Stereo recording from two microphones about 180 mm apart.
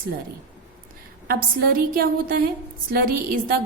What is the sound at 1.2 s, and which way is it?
A woman's voice, 55° right (ahead or behind).